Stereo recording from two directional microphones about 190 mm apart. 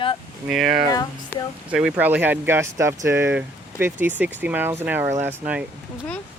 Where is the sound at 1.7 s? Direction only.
5° right (ahead or behind).